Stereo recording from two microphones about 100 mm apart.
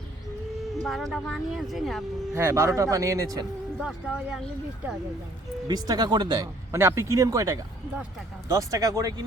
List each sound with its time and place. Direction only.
0.9 s speech: centre (ahead or behind)
2.3 s a man's voice: 30° right (ahead or behind)
3.8 s speech: 5° right (ahead or behind)
5.6 s speech: 40° right (ahead or behind)
6.7 s a man's voice: 25° right (ahead or behind)